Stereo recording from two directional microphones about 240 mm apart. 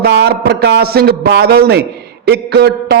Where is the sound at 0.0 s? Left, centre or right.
Right.